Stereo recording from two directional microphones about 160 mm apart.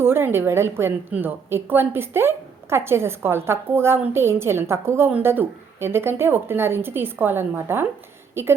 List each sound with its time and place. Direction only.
0.0 s a woman's voice: 15° right (ahead or behind)